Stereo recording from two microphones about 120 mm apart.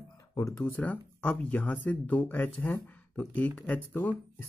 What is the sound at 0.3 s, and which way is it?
Speech, 30° left (ahead or behind).